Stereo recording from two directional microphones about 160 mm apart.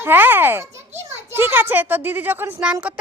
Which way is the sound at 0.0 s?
15° right (ahead or behind).